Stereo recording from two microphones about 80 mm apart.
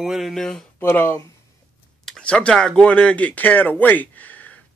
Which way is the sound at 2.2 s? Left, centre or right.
Centre.